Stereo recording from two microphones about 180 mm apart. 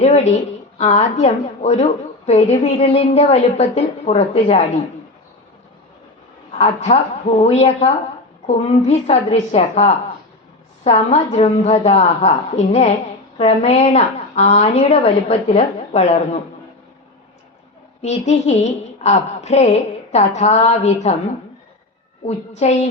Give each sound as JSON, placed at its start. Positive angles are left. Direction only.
{"t": 0.0, "sound": "a woman's voice", "side_deg": 40}
{"t": 6.6, "sound": "a woman's voice", "side_deg": 35}
{"t": 18.0, "sound": "a woman's voice", "side_deg": 40}
{"t": 22.2, "sound": "a woman's voice", "side_deg": 40}